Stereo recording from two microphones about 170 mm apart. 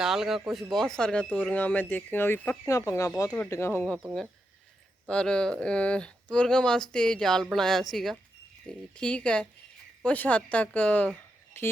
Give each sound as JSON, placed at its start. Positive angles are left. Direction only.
{"t": 0.0, "sound": "a woman's voice", "side_deg": 0}